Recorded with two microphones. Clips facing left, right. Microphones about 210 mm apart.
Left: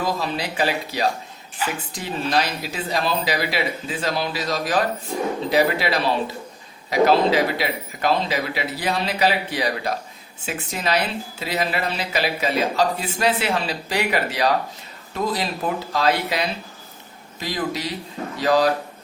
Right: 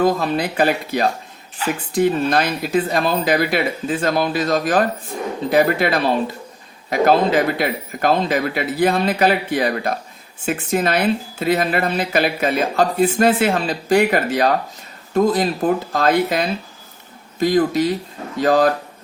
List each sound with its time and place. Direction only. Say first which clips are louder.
0.0 s speech: right 7 dB; 50° right (ahead or behind)